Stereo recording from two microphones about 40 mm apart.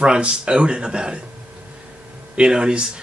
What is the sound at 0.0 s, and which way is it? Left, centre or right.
Speech, centre.